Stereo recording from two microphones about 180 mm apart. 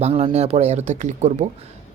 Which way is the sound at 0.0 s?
35° right (ahead or behind).